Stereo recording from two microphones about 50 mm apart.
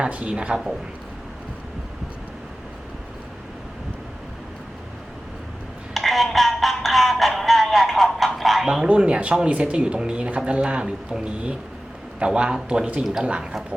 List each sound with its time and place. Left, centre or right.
0.0 s speech: right
5.9 s music: centre
8.6 s speech: centre
8.9 s speech: right
12.2 s speech: right
13.4 s speech: centre